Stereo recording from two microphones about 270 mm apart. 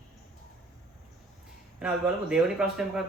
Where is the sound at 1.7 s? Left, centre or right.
Centre.